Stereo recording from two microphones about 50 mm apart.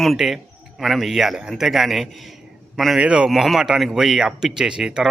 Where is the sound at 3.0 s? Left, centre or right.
Centre.